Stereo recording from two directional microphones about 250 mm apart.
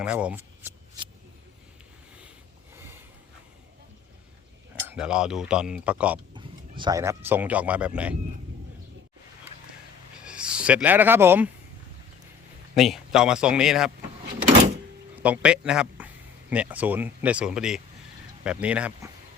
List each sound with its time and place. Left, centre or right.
0.0 s speech: centre
1.0 s vehicle: centre
2.7 s a sound: centre
4.9 s speech: centre
6.3 s speech: centre
10.2 s speech: centre
12.7 s speech: centre
15.1 s a man's voice: centre